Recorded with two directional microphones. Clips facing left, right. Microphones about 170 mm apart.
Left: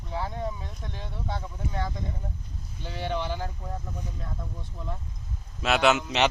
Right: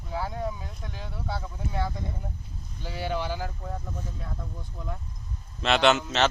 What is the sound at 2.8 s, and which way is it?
Speech, 5° right (ahead or behind).